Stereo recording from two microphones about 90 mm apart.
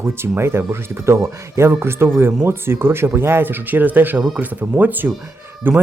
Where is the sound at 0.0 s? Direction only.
25° right (ahead or behind).